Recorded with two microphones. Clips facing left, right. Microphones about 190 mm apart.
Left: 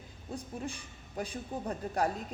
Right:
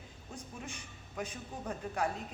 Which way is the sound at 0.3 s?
35° left (ahead or behind).